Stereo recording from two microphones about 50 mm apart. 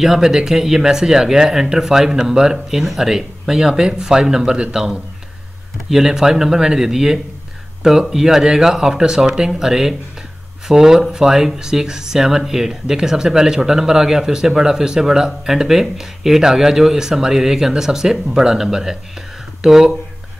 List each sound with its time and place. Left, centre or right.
0.0 s a man's voice: centre
5.9 s speech: centre